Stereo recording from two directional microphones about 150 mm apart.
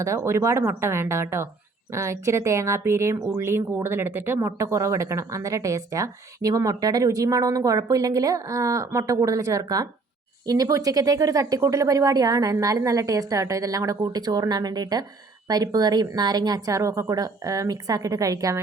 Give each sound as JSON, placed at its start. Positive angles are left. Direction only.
{"t": 0.0, "sound": "a woman's voice", "side_deg": -20}